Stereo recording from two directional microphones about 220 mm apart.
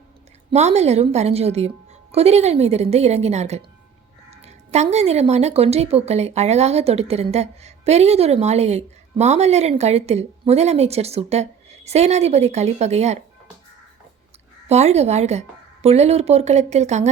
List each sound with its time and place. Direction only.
0.5 s a woman's voice: 30° right (ahead or behind)
14.7 s a woman's voice: 30° right (ahead or behind)